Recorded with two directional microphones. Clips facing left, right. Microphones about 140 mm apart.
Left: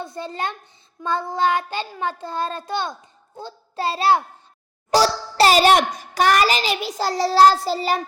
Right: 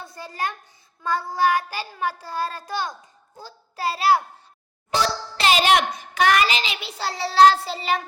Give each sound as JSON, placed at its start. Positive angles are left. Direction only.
{"t": 0.0, "sound": "a woman's voice", "side_deg": 25}
{"t": 1.0, "sound": "child singing", "side_deg": 25}
{"t": 4.9, "sound": "a child's voice", "side_deg": 40}